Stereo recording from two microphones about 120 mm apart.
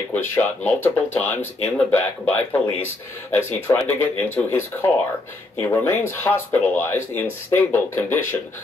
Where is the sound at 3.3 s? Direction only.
20° left (ahead or behind).